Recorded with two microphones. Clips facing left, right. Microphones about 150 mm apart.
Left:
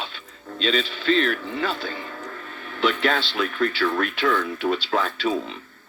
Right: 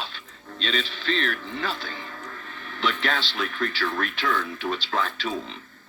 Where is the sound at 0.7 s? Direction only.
45° left (ahead or behind).